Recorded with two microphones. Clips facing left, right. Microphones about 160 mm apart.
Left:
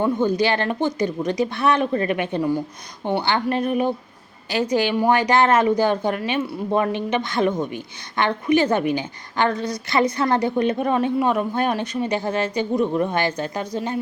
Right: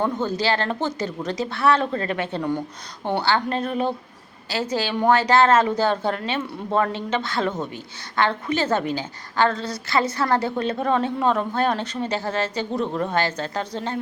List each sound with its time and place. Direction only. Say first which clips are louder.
0.0 s a woman's voice: left 4 dB; 15° left (ahead or behind)